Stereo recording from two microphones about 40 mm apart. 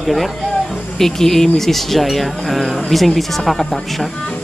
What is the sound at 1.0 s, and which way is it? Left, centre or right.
Speech, centre.